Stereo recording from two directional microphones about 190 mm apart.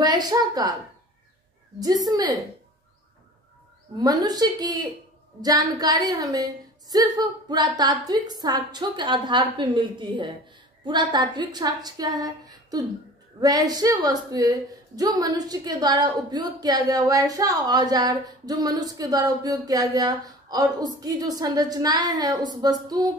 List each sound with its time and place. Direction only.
0.0 s a woman's voice: 20° right (ahead or behind)
2.0 s a woman's voice: 20° right (ahead or behind)
4.0 s a woman's voice: 20° right (ahead or behind)